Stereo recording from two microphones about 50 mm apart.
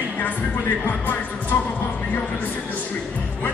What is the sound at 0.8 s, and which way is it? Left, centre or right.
Music, left.